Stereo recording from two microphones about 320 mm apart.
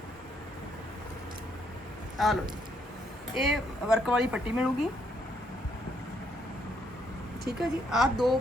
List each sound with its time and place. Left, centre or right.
2.1 s speech: centre
7.6 s speech: centre